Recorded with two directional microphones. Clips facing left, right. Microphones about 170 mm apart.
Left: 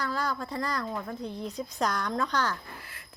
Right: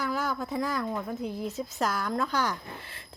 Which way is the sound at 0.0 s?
10° right (ahead or behind).